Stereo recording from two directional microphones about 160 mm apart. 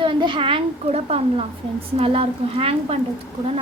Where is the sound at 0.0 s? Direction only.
30° right (ahead or behind).